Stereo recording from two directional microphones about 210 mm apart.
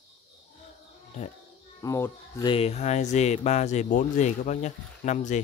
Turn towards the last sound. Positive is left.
turn(degrees=35)  # may be behind; listen again after turning